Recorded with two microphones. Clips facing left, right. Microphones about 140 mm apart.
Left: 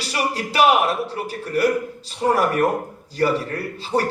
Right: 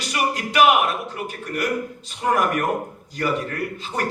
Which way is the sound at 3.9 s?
35° left (ahead or behind).